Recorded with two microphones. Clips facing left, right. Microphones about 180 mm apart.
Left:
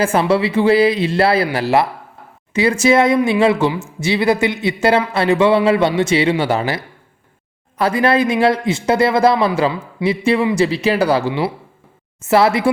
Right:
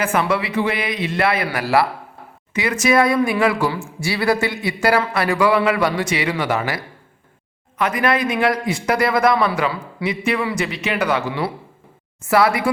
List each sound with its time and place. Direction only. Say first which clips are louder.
0.0 s speech: left 5 dB; 30° left (ahead or behind)